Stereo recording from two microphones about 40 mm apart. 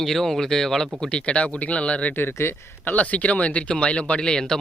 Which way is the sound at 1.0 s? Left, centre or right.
Left.